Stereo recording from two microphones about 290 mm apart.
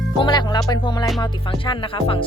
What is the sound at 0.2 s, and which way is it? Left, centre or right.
Speech, centre.